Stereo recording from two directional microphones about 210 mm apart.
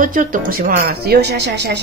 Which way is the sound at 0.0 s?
40° right (ahead or behind).